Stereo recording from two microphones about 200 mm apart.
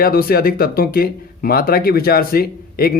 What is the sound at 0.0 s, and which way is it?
Speech, 50° left (ahead or behind).